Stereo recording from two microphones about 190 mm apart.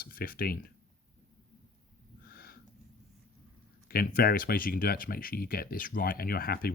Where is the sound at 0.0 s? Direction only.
50° left (ahead or behind).